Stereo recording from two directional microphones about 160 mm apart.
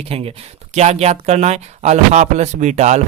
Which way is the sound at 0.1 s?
40° right (ahead or behind).